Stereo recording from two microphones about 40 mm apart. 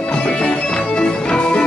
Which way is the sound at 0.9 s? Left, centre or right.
Left.